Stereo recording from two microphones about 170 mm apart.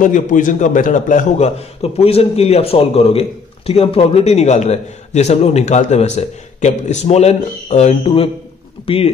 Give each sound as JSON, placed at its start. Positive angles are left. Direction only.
{"t": 0.0, "sound": "a man's voice", "side_deg": 50}